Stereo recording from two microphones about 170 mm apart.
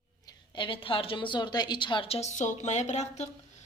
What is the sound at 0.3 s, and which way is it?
A woman's voice, 30° left (ahead or behind).